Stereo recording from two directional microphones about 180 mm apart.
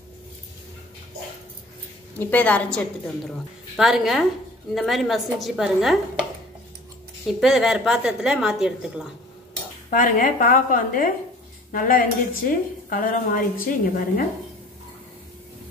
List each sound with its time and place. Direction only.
2.1 s a woman's voice: 10° left (ahead or behind)
7.3 s a woman's voice: centre (ahead or behind)
9.8 s a woman's voice: 45° left (ahead or behind)